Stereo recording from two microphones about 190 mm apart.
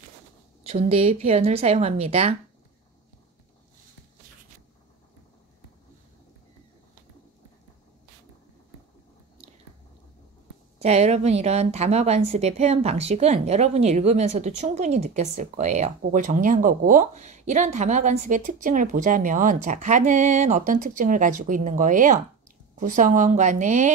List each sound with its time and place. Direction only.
0.7 s speech: 30° right (ahead or behind)
10.8 s speech: 35° right (ahead or behind)